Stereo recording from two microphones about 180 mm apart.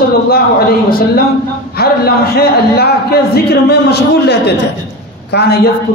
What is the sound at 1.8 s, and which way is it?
A man's voice, 60° left (ahead or behind).